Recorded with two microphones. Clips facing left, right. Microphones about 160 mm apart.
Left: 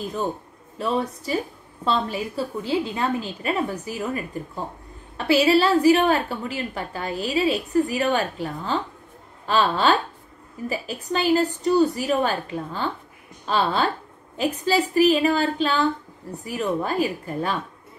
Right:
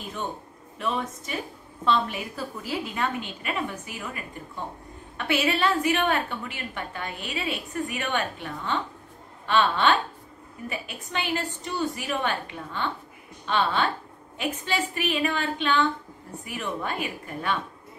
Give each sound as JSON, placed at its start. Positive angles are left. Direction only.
{"t": 0.7, "sound": "a woman's voice", "side_deg": 35}